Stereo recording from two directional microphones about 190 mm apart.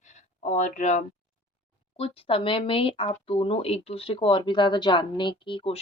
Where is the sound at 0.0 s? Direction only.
40° left (ahead or behind).